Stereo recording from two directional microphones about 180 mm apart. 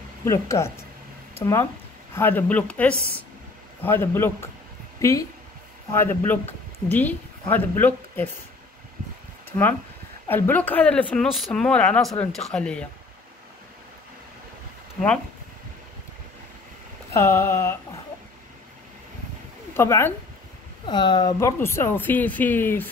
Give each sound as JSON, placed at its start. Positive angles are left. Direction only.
{"t": 0.2, "sound": "a woman's voice", "side_deg": 15}
{"t": 9.5, "sound": "speech", "side_deg": 20}
{"t": 17.1, "sound": "a woman's voice", "side_deg": 15}
{"t": 19.7, "sound": "speech", "side_deg": 15}
{"t": 20.8, "sound": "a woman's voice", "side_deg": 25}